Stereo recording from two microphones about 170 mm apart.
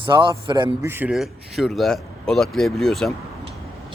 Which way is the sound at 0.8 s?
15° right (ahead or behind).